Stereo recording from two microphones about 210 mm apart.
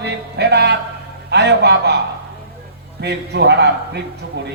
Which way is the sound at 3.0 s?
50° right (ahead or behind).